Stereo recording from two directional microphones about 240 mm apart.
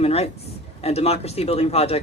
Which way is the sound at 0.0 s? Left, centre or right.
Left.